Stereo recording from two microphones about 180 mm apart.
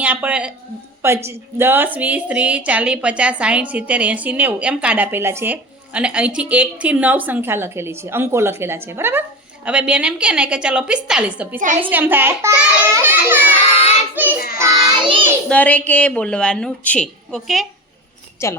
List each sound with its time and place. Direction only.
0.0 s a woman's voice: 10° right (ahead or behind)
14.6 s child singing: 25° right (ahead or behind)
15.4 s a child's voice: 10° left (ahead or behind)
18.4 s a child's voice: 15° left (ahead or behind)